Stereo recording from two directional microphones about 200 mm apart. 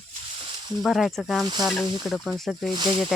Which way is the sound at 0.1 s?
25° right (ahead or behind).